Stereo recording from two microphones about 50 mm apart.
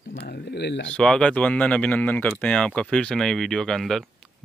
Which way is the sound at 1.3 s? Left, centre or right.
Left.